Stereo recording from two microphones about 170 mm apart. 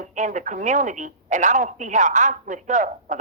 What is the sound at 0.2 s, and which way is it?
A woman's voice, 45° right (ahead or behind).